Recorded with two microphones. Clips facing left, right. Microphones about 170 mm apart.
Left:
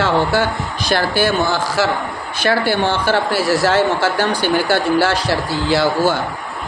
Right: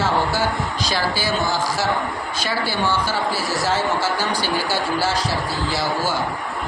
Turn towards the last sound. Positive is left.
turn(degrees=65)  # may be behind; listen again after turning